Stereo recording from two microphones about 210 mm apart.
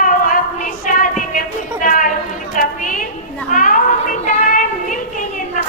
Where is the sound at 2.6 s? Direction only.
40° left (ahead or behind).